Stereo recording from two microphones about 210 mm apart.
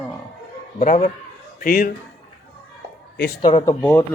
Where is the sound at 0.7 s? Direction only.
35° left (ahead or behind).